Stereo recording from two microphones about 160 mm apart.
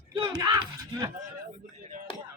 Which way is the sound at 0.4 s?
20° right (ahead or behind).